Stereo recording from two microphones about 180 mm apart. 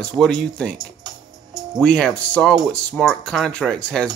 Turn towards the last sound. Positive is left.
turn(degrees=5)  # may be behind; listen again after turning